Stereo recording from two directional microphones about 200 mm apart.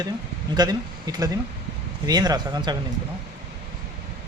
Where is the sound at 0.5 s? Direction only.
20° right (ahead or behind).